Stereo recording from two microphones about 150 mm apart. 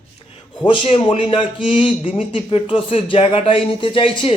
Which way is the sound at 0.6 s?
35° left (ahead or behind).